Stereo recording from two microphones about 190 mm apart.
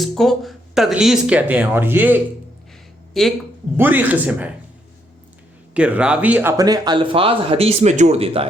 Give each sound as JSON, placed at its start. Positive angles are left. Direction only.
{"t": 0.0, "sound": "speech", "side_deg": 0}
{"t": 3.1, "sound": "speech", "side_deg": 0}
{"t": 3.8, "sound": "a man's voice", "side_deg": -10}
{"t": 5.7, "sound": "speech", "side_deg": -5}